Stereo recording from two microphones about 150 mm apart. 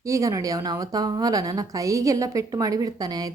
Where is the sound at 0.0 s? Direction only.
20° right (ahead or behind).